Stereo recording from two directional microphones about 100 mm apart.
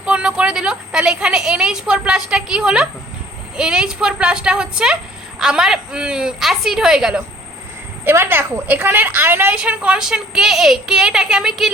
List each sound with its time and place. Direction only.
0.0 s a woman's voice: 10° right (ahead or behind)
8.0 s a woman's voice: 20° right (ahead or behind); by 11.7 s 5° right (ahead or behind)